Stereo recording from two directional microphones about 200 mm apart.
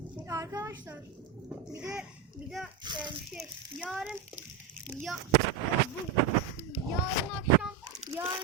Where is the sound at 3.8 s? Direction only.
5° right (ahead or behind).